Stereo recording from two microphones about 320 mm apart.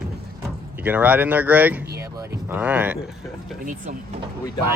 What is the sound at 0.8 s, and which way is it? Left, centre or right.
Speech, centre.